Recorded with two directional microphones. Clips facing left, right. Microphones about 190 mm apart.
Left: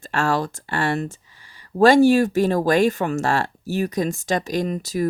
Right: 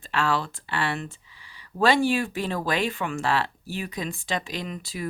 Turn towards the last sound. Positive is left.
turn(degrees=40)  # may be behind; listen again after turning